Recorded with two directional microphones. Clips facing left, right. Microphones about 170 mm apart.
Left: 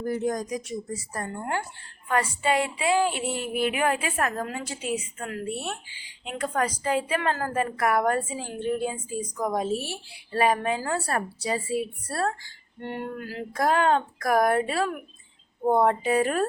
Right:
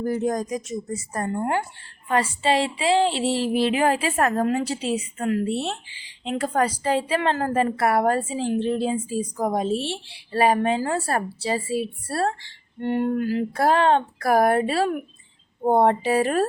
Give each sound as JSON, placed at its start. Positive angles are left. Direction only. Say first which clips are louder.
{"t": 0.0, "sound": "a woman's voice", "louder": "right 3 dB", "side_deg": -40}
{"t": 2.0, "sound": "a woman's voice", "louder": "right 3 dB", "side_deg": -25}